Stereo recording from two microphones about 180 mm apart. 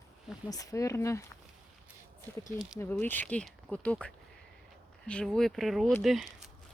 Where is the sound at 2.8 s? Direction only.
10° left (ahead or behind).